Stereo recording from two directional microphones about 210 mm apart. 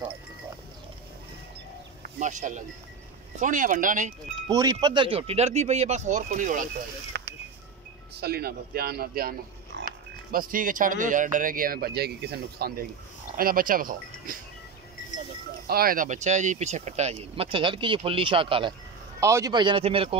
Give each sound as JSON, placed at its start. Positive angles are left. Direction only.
{"t": 2.1, "sound": "speech", "side_deg": -35}
{"t": 4.5, "sound": "speech", "side_deg": -20}
{"t": 7.1, "sound": "a sound", "side_deg": -55}
{"t": 8.2, "sound": "a man's voice", "side_deg": -50}
{"t": 15.6, "sound": "speech", "side_deg": -45}